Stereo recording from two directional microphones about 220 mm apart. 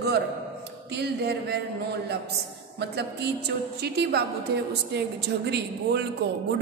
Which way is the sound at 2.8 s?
50° right (ahead or behind).